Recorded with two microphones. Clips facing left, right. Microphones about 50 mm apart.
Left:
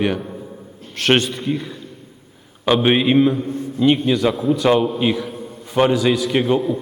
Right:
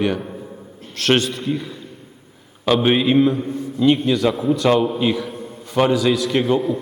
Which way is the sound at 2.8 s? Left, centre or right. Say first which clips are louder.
Left 1 dB; centre.